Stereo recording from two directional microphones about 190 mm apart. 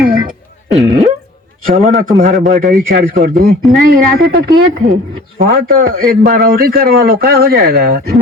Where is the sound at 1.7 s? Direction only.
40° right (ahead or behind).